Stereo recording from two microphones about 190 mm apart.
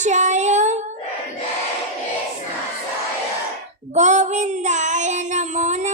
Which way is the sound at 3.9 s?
40° right (ahead or behind).